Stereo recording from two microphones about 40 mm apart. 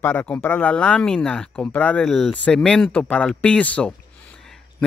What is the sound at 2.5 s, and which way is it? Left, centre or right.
Speech, centre.